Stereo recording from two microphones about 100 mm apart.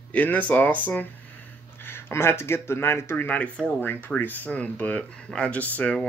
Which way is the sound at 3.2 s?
15° left (ahead or behind).